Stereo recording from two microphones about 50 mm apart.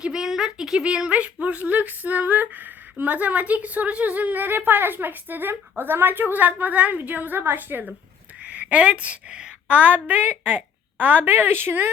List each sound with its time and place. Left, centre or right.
0.0 s speech: centre
0.9 s speech: right
8.4 s a woman's voice: right